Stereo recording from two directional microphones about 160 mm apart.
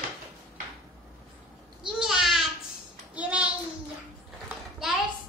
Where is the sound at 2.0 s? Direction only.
Centre (ahead or behind).